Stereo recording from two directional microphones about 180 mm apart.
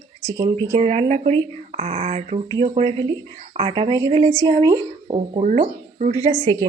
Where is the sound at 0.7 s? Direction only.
40° right (ahead or behind).